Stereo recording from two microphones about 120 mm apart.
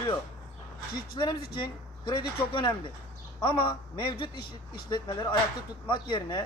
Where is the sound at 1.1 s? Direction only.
40° left (ahead or behind).